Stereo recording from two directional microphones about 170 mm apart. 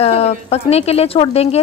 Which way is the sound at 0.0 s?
35° left (ahead or behind).